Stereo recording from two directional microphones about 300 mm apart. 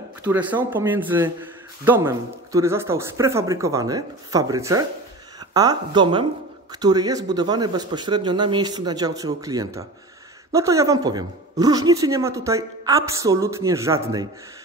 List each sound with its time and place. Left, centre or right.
0.2 s a man's voice: centre